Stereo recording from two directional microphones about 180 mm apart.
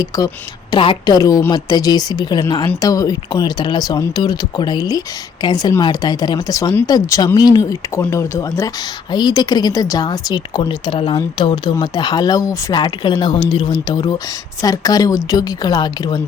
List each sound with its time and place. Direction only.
0.1 s speech: 20° left (ahead or behind)